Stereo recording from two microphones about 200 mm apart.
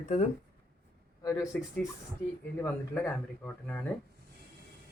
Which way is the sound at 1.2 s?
15° left (ahead or behind).